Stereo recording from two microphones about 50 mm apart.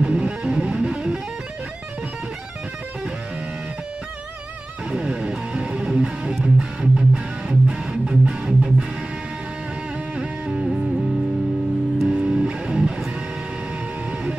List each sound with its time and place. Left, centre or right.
0.0 s music: centre
4.9 s music: centre
10.1 s music: centre
12.1 s music: centre